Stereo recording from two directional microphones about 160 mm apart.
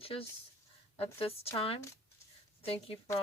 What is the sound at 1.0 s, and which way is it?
A woman's voice, 35° left (ahead or behind).